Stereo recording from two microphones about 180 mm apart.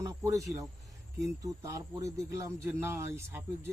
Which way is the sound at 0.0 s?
15° right (ahead or behind).